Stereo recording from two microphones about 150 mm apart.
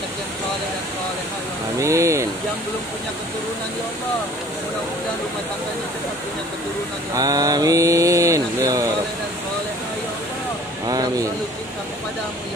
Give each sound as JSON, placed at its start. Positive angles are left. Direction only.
{"t": 1.8, "sound": "mantra", "side_deg": -20}
{"t": 7.2, "sound": "mantra", "side_deg": -25}
{"t": 10.9, "sound": "mantra", "side_deg": -25}